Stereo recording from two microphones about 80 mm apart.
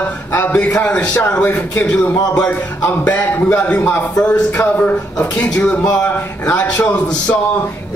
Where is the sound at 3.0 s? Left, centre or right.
Centre.